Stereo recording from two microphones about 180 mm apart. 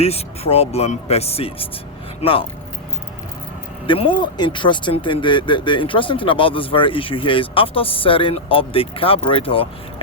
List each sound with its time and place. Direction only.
0.0 s speech: 35° left (ahead or behind)
3.8 s speech: 30° left (ahead or behind)